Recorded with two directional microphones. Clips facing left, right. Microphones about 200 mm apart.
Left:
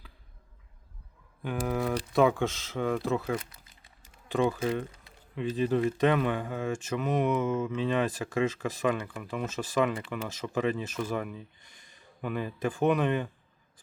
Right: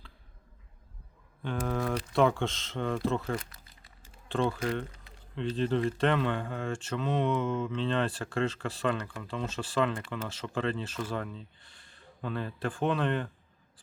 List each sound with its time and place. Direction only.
1.4 s a man's voice: 10° left (ahead or behind)